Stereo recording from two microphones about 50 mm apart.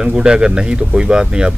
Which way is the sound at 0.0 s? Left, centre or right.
Centre.